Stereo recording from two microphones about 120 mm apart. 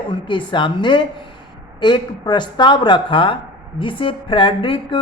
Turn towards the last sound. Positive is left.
turn(degrees=45)  # may be behind; listen again after turning